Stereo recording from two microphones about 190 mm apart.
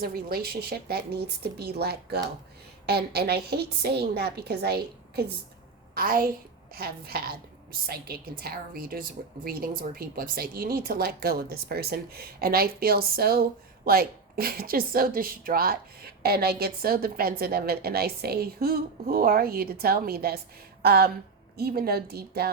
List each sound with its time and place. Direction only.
0.0 s a woman's voice: 55° right (ahead or behind)